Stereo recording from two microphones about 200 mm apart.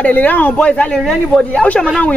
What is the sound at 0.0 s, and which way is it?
Speech, 10° left (ahead or behind).